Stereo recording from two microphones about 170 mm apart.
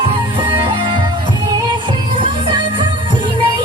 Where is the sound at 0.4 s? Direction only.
30° right (ahead or behind).